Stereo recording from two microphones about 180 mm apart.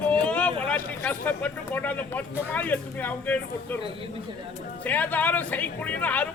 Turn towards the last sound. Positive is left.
turn(degrees=10)  # may be behind; listen again after turning